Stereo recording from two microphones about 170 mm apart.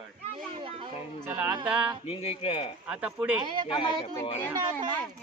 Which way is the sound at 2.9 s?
5° right (ahead or behind).